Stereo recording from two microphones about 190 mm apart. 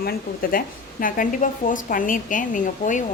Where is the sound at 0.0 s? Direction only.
50° left (ahead or behind).